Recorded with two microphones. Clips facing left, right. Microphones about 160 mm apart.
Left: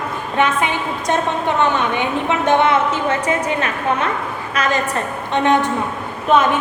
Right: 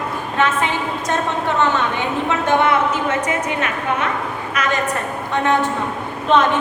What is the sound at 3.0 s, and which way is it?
A woman's voice, 30° left (ahead or behind).